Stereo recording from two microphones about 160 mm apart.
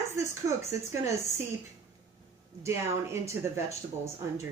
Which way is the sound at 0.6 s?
15° right (ahead or behind).